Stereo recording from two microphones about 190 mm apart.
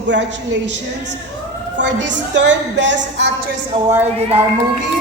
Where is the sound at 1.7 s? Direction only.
70° right (ahead or behind).